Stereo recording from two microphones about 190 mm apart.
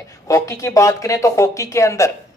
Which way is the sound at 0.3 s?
15° left (ahead or behind).